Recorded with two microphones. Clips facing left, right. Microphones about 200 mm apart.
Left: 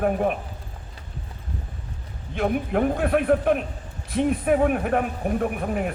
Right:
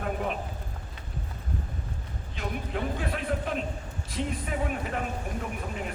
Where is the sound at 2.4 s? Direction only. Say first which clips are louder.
Left 10 dB; 60° left (ahead or behind).